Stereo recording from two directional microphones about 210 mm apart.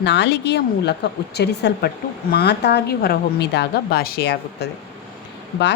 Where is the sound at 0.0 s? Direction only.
55° left (ahead or behind).